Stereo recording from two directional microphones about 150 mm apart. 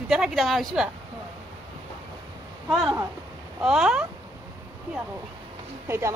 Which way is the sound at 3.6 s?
5° right (ahead or behind).